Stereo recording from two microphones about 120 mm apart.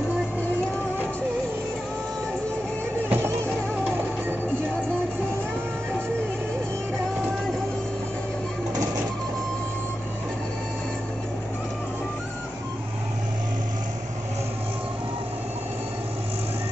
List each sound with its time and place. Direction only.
3.1 s music: 20° right (ahead or behind)